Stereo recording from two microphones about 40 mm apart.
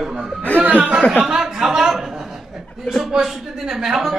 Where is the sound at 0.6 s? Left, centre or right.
Right.